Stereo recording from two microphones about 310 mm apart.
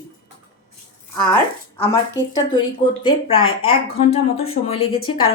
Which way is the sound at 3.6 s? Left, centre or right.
Centre.